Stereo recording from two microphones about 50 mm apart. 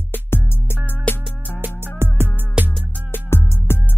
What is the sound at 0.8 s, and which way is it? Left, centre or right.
Music, left.